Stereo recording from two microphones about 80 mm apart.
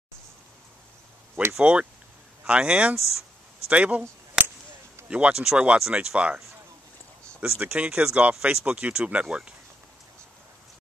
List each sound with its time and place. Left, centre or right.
1.6 s speech: centre
5.0 s speech: centre